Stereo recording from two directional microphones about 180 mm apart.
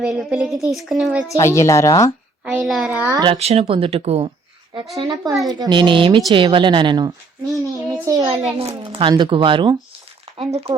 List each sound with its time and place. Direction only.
0.0 s a woman's voice: 5° right (ahead or behind)
1.3 s speech: 15° left (ahead or behind)
2.4 s a woman's voice: 5° right (ahead or behind)
3.1 s speech: 20° right (ahead or behind)
3.3 s speech: 35° right (ahead or behind)
4.9 s speech: 25° right (ahead or behind)